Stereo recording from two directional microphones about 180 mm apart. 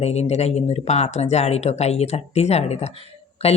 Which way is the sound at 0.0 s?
35° left (ahead or behind).